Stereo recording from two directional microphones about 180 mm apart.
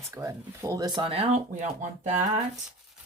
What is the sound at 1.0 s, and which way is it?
Speech, 35° right (ahead or behind).